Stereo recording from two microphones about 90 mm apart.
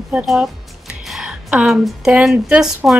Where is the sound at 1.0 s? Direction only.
5° right (ahead or behind).